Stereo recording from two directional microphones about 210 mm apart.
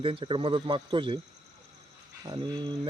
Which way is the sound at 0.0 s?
25° right (ahead or behind).